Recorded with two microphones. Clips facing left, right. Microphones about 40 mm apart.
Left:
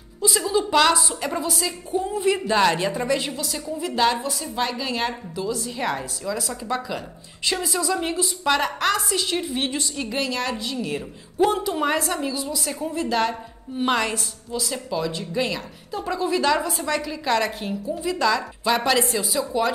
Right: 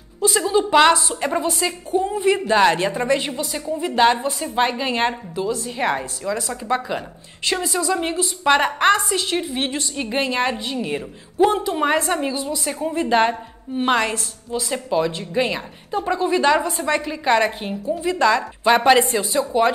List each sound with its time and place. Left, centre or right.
0.3 s a woman's voice: centre
2.0 s a woman's voice: centre
7.6 s a woman's voice: centre
9.9 s a woman's voice: right
11.0 s a woman's voice: centre
12.1 s a woman's voice: right
13.8 s a woman's voice: centre